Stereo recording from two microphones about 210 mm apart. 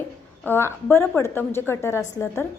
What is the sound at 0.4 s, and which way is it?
A woman's voice, 10° left (ahead or behind).